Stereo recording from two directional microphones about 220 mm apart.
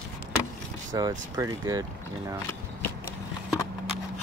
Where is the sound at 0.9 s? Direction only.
15° right (ahead or behind).